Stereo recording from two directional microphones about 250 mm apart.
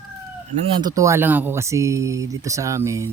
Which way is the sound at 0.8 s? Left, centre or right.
Centre.